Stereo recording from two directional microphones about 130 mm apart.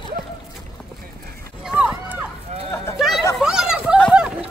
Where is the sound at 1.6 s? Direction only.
10° right (ahead or behind).